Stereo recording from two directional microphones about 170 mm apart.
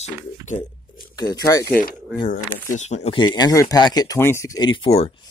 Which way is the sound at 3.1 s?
25° left (ahead or behind).